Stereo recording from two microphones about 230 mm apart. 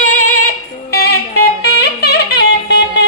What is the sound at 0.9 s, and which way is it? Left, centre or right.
Music, left.